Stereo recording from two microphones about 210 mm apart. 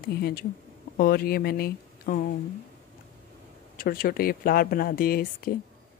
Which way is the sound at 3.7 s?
45° left (ahead or behind).